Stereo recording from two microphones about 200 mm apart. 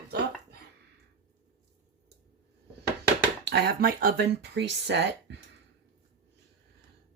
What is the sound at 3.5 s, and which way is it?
Speech, 55° right (ahead or behind).